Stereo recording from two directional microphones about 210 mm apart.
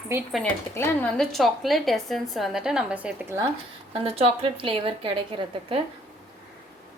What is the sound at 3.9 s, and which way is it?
A woman's voice, 30° right (ahead or behind).